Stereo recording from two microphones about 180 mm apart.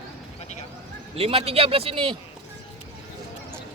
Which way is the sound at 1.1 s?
35° right (ahead or behind).